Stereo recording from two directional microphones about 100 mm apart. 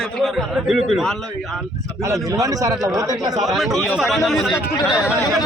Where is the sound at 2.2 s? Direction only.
35° right (ahead or behind).